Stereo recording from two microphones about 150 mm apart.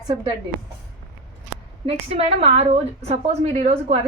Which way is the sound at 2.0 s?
45° right (ahead or behind).